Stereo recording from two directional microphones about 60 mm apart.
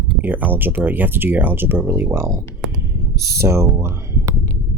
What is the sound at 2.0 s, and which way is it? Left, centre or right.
Speech, right.